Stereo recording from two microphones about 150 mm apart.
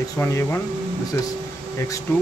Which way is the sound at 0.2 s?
15° left (ahead or behind).